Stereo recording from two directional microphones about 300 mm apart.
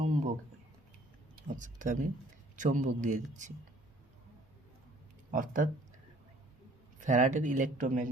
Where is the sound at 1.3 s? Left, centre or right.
Right.